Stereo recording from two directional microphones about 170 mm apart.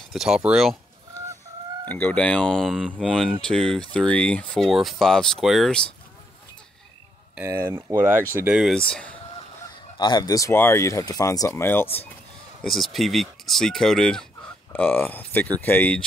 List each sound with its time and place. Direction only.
0.1 s speech: 5° right (ahead or behind)
1.9 s speech: 10° left (ahead or behind)
7.3 s speech: 15° right (ahead or behind); by 9.2 s 5° left (ahead or behind)
9.9 s speech: 25° left (ahead or behind)
12.6 s speech: centre (ahead or behind)